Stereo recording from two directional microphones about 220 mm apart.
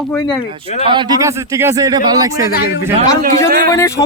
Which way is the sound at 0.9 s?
20° right (ahead or behind).